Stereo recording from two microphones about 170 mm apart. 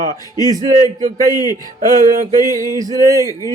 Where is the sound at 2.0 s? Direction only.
50° right (ahead or behind).